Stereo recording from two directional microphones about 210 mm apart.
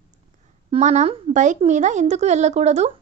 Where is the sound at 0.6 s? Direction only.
35° right (ahead or behind).